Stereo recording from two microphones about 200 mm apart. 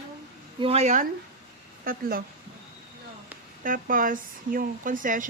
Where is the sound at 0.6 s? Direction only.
30° right (ahead or behind).